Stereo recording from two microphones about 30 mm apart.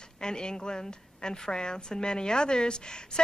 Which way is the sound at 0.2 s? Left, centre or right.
Left.